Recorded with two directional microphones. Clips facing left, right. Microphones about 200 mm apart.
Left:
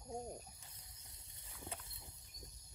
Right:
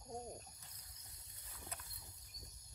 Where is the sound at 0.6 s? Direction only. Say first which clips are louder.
Left 1 dB; 25° left (ahead or behind).